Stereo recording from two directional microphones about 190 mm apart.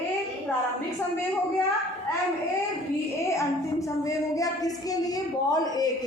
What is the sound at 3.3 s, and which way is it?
A woman's voice, 15° left (ahead or behind).